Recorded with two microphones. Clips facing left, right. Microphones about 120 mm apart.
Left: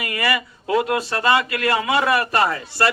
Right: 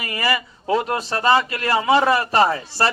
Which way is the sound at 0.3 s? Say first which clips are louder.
Right 2 dB; 30° right (ahead or behind).